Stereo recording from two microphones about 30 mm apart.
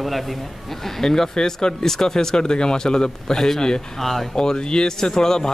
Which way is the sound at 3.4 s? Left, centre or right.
Centre.